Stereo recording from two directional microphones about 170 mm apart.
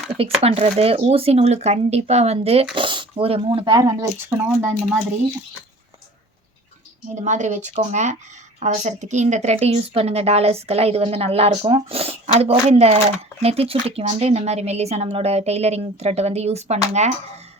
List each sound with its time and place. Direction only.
0.2 s speech: 35° right (ahead or behind)
3.8 s speech: 20° right (ahead or behind)
7.2 s speech: 45° right (ahead or behind)